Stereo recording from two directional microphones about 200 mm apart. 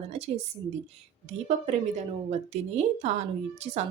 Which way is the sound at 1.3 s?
35° right (ahead or behind).